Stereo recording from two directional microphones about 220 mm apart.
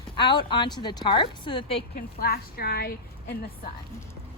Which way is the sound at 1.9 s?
45° left (ahead or behind).